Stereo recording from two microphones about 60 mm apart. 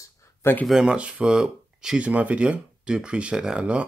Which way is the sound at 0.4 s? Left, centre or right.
Left.